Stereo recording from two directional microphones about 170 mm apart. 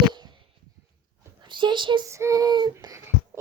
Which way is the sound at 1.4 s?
25° right (ahead or behind).